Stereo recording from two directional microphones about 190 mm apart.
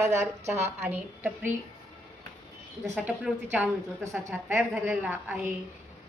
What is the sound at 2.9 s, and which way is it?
A woman's voice, 10° right (ahead or behind).